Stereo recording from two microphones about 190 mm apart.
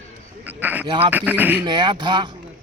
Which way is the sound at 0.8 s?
30° right (ahead or behind).